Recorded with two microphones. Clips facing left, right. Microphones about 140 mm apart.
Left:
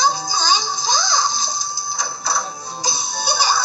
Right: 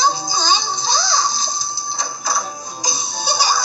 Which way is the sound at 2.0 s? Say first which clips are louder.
Right 1 dB; 15° right (ahead or behind).